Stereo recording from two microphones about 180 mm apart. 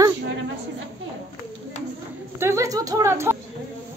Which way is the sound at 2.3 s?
15° right (ahead or behind).